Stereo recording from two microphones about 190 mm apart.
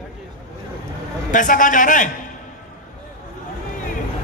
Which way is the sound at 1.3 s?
45° left (ahead or behind).